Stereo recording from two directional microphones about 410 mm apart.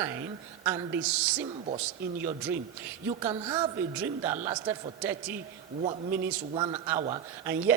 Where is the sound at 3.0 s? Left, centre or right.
Centre.